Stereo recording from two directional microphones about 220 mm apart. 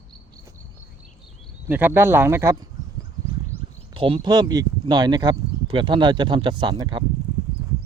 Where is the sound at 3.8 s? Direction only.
25° right (ahead or behind).